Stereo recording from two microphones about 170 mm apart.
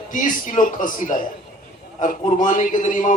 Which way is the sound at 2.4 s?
50° left (ahead or behind).